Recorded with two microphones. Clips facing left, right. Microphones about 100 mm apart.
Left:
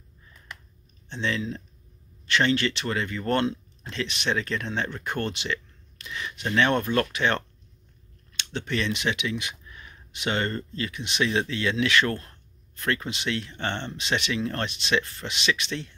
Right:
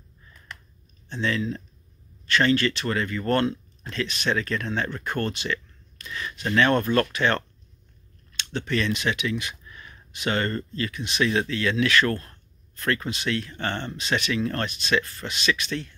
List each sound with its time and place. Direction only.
1.0 s speech: 20° left (ahead or behind)